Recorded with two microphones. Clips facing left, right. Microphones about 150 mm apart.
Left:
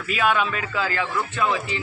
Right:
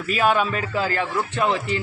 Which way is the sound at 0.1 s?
40° right (ahead or behind).